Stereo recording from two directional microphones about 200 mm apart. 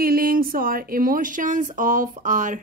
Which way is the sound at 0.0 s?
45° right (ahead or behind).